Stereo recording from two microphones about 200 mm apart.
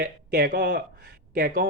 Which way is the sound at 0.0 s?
55° right (ahead or behind).